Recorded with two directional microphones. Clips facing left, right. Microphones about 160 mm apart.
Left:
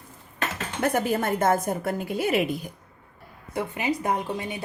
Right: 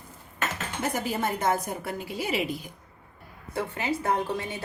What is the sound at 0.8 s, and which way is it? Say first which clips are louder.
A woman's voice: left 5 dB; 55° left (ahead or behind).